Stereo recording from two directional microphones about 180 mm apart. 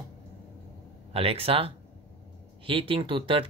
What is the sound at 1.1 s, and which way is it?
Speech, 30° right (ahead or behind).